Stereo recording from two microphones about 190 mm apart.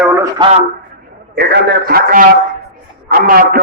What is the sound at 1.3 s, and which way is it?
A man's voice, 60° right (ahead or behind).